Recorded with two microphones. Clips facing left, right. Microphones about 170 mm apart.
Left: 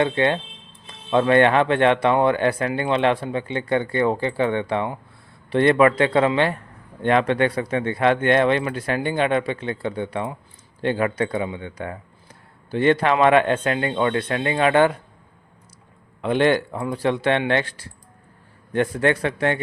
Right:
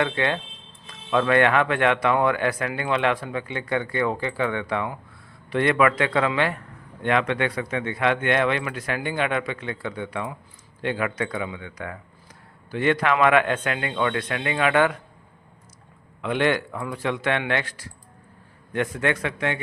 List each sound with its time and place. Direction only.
0.0 s speech: 25° left (ahead or behind)
16.2 s speech: 35° left (ahead or behind)